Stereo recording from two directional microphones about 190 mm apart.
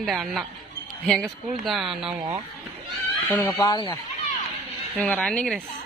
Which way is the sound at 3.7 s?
20° left (ahead or behind).